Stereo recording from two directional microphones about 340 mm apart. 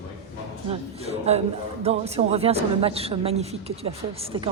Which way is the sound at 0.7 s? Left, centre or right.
Centre.